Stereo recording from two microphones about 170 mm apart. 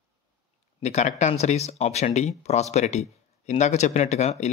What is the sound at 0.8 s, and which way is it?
Speech, 40° left (ahead or behind).